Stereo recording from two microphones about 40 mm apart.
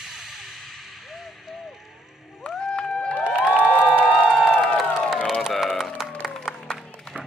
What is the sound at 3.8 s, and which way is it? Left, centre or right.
Crowd, left.